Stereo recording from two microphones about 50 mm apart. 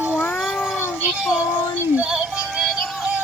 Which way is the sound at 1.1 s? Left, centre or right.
Centre.